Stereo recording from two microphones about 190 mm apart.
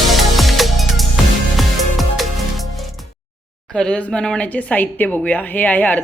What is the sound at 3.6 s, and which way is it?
Speech, 5° left (ahead or behind).